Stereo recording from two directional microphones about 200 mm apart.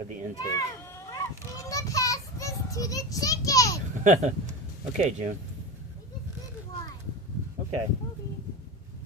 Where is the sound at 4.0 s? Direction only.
40° right (ahead or behind).